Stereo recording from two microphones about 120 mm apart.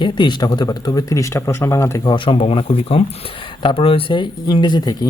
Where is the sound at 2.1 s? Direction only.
45° left (ahead or behind).